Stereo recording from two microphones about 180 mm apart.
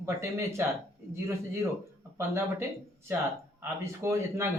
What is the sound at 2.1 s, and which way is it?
Speech, 15° right (ahead or behind).